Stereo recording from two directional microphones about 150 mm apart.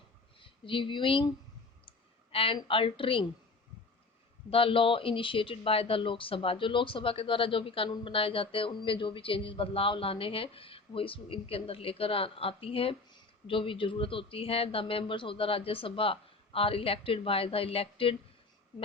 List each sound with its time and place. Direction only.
0.3 s speech: 35° left (ahead or behind)
2.3 s a woman's voice: 35° left (ahead or behind)
4.4 s speech: 40° left (ahead or behind)